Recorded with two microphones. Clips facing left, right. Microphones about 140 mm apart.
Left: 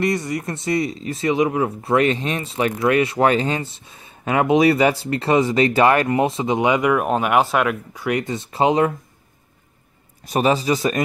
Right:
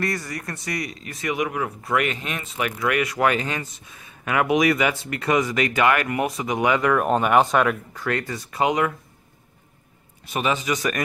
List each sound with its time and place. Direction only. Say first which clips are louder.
0.0 s speech: left 6 dB; 20° left (ahead or behind)
10.2 s a man's voice: left 6 dB; 35° left (ahead or behind)